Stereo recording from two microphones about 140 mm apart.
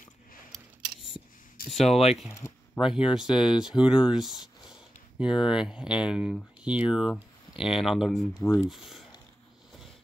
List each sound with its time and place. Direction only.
1.9 s speech: 50° left (ahead or behind)
2.3 s speech: 20° left (ahead or behind)
2.8 s speech: 5° right (ahead or behind)